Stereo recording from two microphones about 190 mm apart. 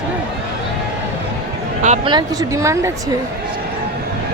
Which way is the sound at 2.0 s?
20° right (ahead or behind).